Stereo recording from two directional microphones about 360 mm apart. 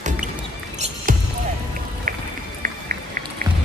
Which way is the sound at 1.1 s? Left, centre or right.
Right.